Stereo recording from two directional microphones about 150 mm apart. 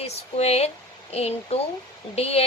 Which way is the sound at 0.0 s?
45° left (ahead or behind).